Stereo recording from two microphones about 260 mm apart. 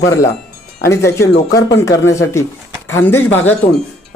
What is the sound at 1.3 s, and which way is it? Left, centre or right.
Speech, left.